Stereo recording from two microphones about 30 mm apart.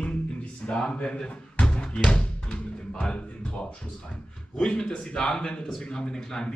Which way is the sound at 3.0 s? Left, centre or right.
Left.